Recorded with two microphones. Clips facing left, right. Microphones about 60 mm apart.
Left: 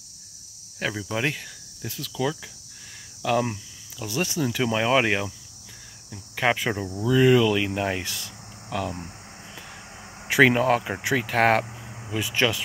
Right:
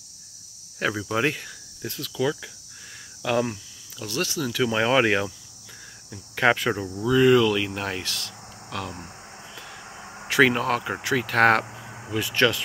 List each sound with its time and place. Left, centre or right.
0.7 s speech: centre
4.0 s speech: centre
4.6 s speech: centre
6.3 s speech: centre
9.8 s a sound: centre
10.2 s speech: centre